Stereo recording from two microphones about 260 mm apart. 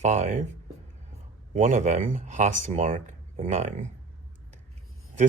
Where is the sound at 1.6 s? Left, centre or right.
Right.